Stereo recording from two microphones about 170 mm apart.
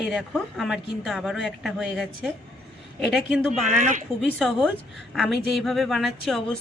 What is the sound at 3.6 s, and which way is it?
Speech, 45° right (ahead or behind).